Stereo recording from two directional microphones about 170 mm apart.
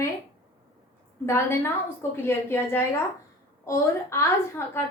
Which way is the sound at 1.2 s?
15° left (ahead or behind).